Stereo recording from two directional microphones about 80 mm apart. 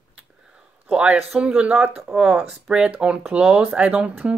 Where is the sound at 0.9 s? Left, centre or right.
Centre.